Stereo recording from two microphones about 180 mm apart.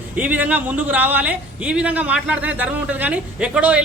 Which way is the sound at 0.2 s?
10° right (ahead or behind).